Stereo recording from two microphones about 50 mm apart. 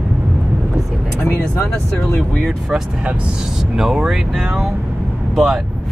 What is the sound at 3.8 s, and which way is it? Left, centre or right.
Speech, centre.